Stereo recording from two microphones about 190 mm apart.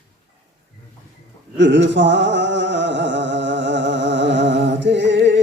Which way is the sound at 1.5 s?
70° right (ahead or behind).